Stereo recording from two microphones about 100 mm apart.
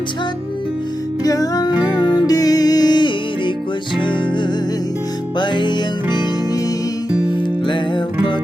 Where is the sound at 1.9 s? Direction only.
45° left (ahead or behind).